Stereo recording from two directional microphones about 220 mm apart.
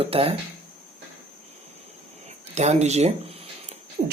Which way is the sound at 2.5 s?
30° right (ahead or behind).